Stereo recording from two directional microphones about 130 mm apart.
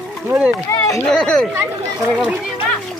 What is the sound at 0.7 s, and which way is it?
Speech, 25° left (ahead or behind).